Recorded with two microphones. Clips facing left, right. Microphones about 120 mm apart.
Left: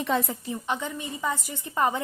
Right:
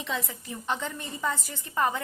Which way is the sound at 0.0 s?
50° left (ahead or behind).